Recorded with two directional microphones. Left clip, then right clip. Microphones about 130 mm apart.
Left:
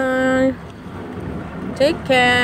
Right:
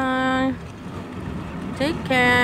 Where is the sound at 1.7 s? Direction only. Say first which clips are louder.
Left 7 dB; 5° left (ahead or behind).